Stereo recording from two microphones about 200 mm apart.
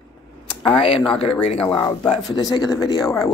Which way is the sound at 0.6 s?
30° left (ahead or behind).